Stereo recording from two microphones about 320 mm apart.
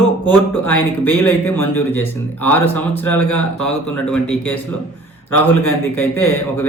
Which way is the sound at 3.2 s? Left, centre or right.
Left.